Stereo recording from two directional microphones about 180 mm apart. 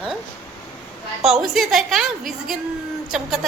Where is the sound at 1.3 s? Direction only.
Centre (ahead or behind).